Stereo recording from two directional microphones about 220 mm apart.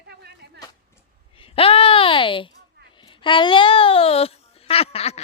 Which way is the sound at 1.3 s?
25° left (ahead or behind).